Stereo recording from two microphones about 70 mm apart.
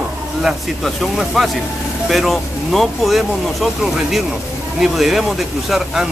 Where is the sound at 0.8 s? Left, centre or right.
Centre.